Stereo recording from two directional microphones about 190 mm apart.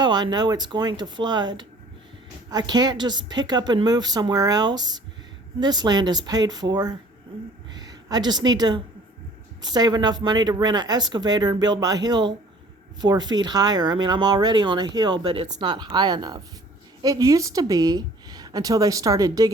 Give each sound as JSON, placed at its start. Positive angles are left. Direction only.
{"t": 0.0, "sound": "a woman's voice", "side_deg": -20}